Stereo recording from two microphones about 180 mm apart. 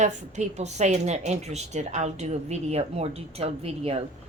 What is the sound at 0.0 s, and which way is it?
Speech, 40° right (ahead or behind).